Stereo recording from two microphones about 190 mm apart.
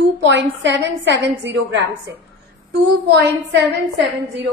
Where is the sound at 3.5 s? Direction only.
65° right (ahead or behind).